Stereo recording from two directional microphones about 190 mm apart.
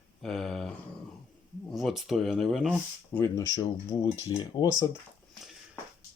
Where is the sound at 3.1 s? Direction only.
15° left (ahead or behind).